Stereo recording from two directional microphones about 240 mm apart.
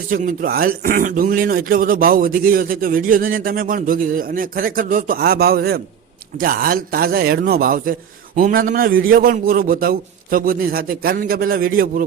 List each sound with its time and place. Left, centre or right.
0.1 s speech: right